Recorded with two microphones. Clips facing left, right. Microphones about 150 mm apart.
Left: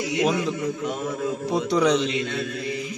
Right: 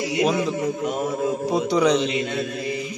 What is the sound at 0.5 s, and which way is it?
Speech, 45° right (ahead or behind).